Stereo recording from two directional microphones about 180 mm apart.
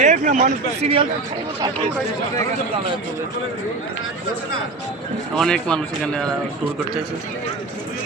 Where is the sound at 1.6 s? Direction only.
25° right (ahead or behind).